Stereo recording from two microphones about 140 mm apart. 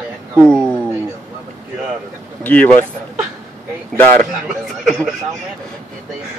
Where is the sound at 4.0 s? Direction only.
15° left (ahead or behind).